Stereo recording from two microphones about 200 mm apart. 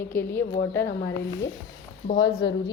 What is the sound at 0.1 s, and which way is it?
Speech, 10° left (ahead or behind).